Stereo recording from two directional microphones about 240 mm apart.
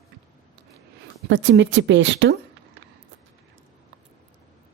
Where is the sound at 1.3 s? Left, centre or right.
Right.